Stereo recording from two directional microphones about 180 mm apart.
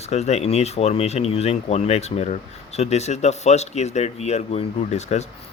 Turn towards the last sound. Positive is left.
turn(degrees=40)  # may be behind; listen again after turning